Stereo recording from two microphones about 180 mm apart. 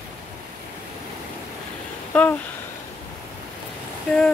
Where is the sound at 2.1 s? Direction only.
10° left (ahead or behind).